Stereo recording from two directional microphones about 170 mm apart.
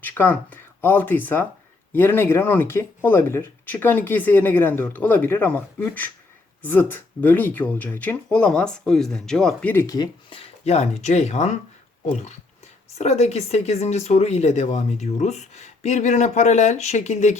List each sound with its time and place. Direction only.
0.0 s speech: 10° left (ahead or behind)
9.8 s speech: 25° left (ahead or behind); by 11.5 s 40° left (ahead or behind)
13.0 s speech: 40° left (ahead or behind)